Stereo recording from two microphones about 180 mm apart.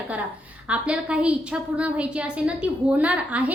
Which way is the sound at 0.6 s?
5° right (ahead or behind).